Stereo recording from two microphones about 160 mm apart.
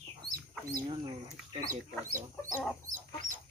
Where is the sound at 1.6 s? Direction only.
60° right (ahead or behind).